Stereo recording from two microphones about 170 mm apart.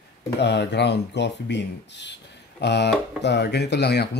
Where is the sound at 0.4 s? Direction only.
85° left.